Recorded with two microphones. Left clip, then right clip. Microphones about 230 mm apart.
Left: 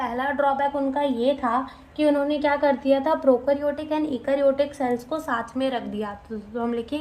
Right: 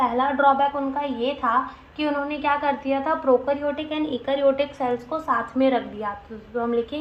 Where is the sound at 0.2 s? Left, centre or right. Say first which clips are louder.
Right 2 dB; left.